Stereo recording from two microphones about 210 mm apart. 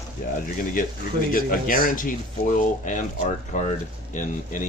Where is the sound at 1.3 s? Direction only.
40° left (ahead or behind).